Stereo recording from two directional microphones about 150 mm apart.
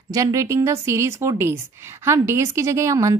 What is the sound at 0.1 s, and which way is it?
A woman's voice, 20° right (ahead or behind).